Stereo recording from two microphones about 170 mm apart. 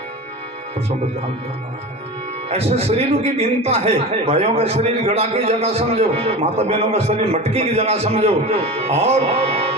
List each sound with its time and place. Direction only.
2.5 s a man's voice: 35° right (ahead or behind)